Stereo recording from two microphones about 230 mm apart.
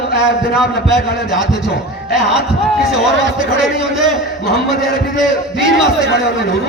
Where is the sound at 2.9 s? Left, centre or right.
Centre.